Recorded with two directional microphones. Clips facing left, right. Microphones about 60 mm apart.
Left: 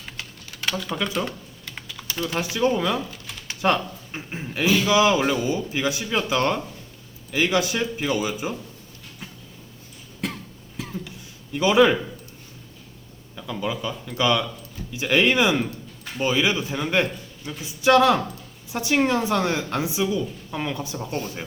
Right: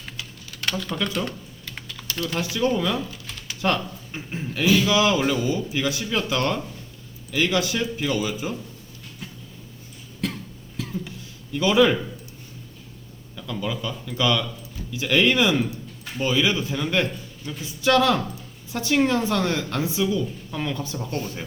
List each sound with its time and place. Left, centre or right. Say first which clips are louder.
0.2 s typing: left 1 dB; left
0.6 s speech: even; centre
1.3 s typing: even; centre
3.4 s a woman's voice: left 2 dB; left
10.2 s cough: right 1 dB; left
10.8 s a sound: right 1 dB; left
11.5 s a woman's voice: left 1 dB; left
13.3 s a woman's voice: left 1 dB; left